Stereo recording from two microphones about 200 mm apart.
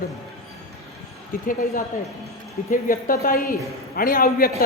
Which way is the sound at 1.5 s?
45° left (ahead or behind).